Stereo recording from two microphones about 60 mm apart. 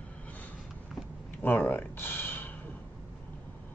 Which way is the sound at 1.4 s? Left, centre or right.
Left.